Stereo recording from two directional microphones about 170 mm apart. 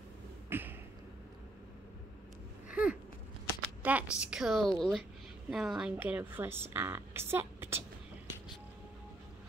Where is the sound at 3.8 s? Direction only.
10° right (ahead or behind).